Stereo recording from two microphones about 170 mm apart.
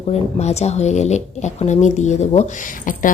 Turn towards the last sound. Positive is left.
turn(degrees=50)  # may be behind; listen again after turning